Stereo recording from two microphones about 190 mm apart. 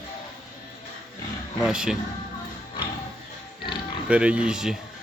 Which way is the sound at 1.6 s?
5° right (ahead or behind).